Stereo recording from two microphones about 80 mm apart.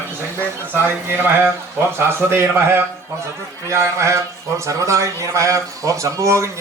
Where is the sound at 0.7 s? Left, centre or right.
Right.